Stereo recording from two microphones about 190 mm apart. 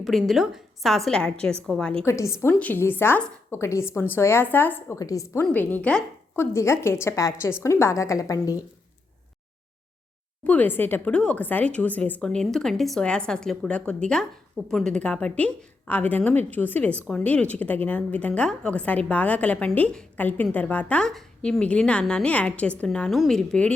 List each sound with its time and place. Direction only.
0.0 s a woman's voice: centre (ahead or behind); by 8.5 s 15° left (ahead or behind)
10.4 s a woman's voice: 10° left (ahead or behind)